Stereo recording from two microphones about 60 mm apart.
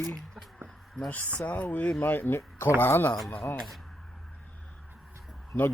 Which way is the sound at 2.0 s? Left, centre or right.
Left.